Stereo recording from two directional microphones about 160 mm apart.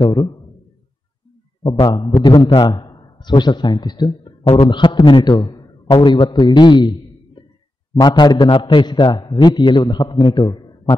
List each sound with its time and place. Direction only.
0.0 s a man's voice: 30° left (ahead or behind)
1.6 s a man's voice: 30° left (ahead or behind)